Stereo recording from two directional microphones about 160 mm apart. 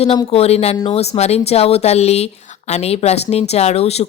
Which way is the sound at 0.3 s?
40° left (ahead or behind).